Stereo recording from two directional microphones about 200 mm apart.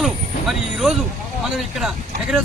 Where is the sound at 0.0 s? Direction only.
Centre (ahead or behind).